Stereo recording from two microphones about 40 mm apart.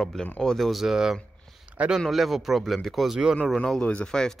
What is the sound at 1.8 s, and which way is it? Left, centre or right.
Speech, right.